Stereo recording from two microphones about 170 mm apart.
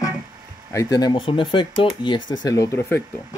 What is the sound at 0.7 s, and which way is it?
Speech, 20° left (ahead or behind).